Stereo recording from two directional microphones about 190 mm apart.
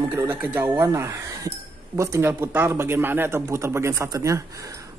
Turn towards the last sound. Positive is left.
turn(degrees=-15)  # may be behind; listen again after turning